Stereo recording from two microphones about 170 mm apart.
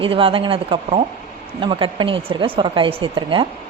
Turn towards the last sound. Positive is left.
turn(degrees=-30)  # may be behind; listen again after turning